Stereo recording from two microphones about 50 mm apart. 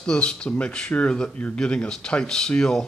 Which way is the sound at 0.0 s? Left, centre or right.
Centre.